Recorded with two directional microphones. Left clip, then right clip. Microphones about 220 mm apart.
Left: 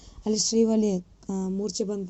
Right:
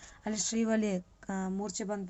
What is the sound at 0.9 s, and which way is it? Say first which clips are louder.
Speech: left 5 dB; 25° right (ahead or behind).